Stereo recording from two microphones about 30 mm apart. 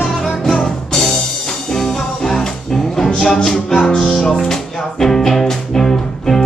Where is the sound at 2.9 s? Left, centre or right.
Centre.